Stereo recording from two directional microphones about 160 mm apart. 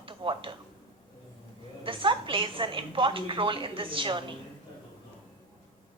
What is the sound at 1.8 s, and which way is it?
A woman's voice, 35° right (ahead or behind).